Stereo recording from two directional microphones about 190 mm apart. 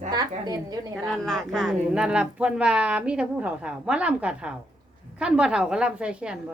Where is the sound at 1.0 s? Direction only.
Centre (ahead or behind).